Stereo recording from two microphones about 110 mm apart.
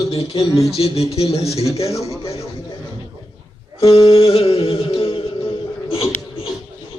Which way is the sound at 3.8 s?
60° left (ahead or behind).